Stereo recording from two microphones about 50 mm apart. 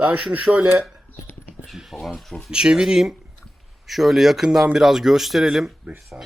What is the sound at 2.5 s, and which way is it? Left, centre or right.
Speech, centre.